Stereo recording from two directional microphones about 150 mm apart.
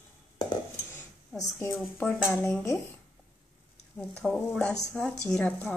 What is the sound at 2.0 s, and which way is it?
Speech, 15° left (ahead or behind).